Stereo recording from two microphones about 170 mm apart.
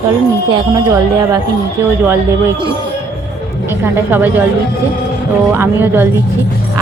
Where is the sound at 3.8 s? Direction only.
10° right (ahead or behind).